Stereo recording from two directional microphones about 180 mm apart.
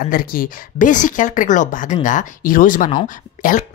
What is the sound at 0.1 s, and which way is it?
Speech, 50° left (ahead or behind).